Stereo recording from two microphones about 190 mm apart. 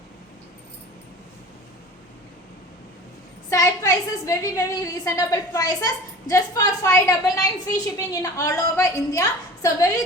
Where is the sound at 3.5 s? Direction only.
15° left (ahead or behind).